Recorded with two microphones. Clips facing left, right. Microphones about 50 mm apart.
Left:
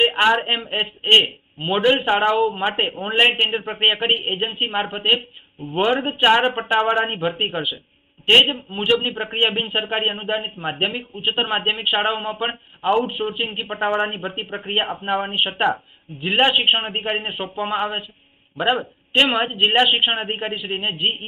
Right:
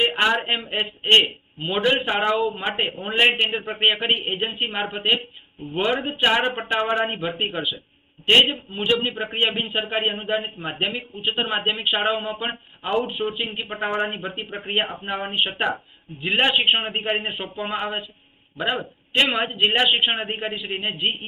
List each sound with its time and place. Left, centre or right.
0.0 s a sound: centre
0.4 s a man's voice: centre
19.1 s a man's voice: centre
19.7 s a man's voice: centre